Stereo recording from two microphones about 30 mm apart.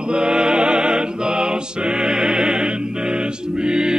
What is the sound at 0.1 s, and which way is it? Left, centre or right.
Music, right.